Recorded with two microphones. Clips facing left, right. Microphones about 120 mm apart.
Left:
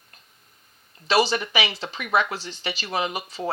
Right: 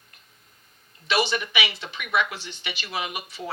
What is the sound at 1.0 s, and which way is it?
Speech, 35° left (ahead or behind).